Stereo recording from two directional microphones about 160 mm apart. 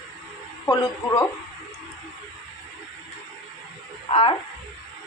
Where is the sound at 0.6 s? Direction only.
20° left (ahead or behind).